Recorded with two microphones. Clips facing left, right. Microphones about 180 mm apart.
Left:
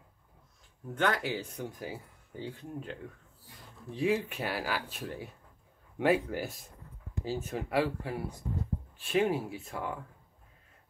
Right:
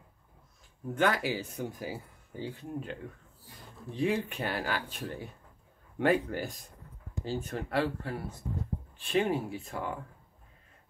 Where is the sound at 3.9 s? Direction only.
5° left (ahead or behind).